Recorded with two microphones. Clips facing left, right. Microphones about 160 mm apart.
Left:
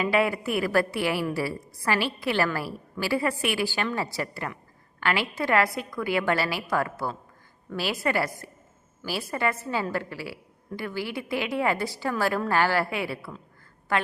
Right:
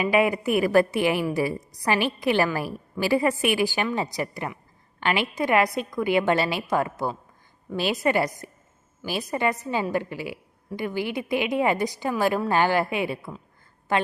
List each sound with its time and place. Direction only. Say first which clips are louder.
0.0 s a woman's voice: right 3 dB; 15° right (ahead or behind)